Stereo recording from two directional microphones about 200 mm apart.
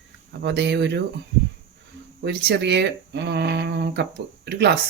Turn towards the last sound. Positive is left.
turn(degrees=-55)  # may be behind; listen again after turning